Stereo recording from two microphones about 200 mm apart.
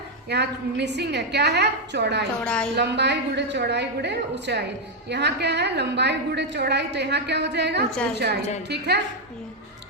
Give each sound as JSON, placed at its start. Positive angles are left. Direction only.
{"t": 0.3, "sound": "a woman's voice", "side_deg": -55}
{"t": 2.4, "sound": "a woman's voice", "side_deg": 5}
{"t": 2.7, "sound": "a woman's voice", "side_deg": -60}